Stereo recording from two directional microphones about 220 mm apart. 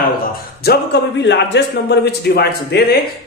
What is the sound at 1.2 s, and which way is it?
A man's voice, 50° left (ahead or behind).